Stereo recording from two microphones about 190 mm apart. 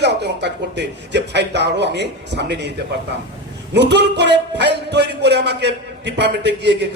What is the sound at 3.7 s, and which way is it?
A man's voice, 65° right (ahead or behind).